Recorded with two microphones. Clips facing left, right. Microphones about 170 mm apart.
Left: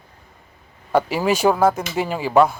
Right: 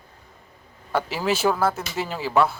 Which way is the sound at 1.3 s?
15° left (ahead or behind).